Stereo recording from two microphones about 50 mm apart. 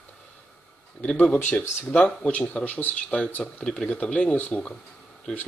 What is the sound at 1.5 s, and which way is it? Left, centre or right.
Speech, left.